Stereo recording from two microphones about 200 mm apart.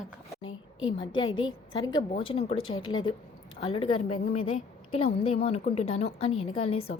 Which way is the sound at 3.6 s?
30° left (ahead or behind).